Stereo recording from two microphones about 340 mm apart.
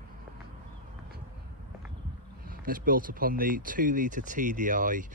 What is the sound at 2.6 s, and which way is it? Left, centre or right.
Speech, right.